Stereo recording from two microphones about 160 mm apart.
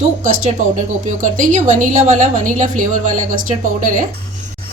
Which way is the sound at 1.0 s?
55° right (ahead or behind).